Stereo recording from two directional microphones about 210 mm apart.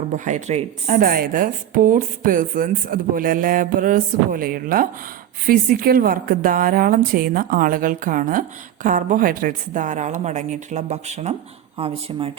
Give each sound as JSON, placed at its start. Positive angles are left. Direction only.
{"t": 0.1, "sound": "a woman's voice", "side_deg": -35}